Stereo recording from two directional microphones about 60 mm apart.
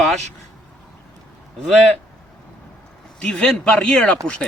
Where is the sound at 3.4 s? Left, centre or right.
Centre.